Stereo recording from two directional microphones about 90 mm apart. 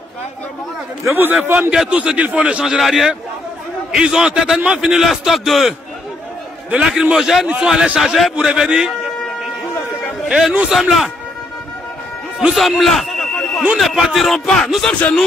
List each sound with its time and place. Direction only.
1.0 s a man's voice: 25° right (ahead or behind)
1.7 s a man's voice: 10° right (ahead or behind)
10.2 s a man's voice: 10° right (ahead or behind)
12.4 s a sound: 5° right (ahead or behind)
13.7 s a man's voice: centre (ahead or behind)